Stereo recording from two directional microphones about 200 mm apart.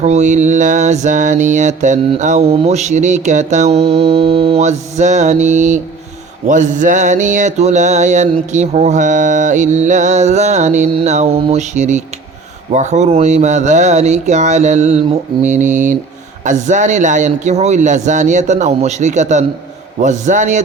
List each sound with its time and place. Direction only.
0.0 s mantra: 35° right (ahead or behind)